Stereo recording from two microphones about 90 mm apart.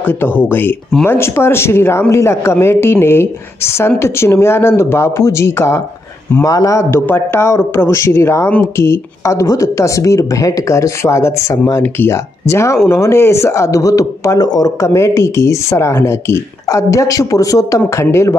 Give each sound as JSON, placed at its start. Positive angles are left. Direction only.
{"t": 0.0, "sound": "speech", "side_deg": 25}
{"t": 14.8, "sound": "speech", "side_deg": 35}